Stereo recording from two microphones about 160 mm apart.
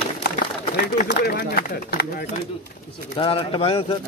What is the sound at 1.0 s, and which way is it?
Speech, 70° left (ahead or behind).